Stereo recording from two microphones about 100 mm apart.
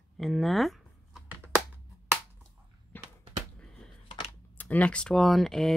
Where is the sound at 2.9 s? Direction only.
20° left (ahead or behind).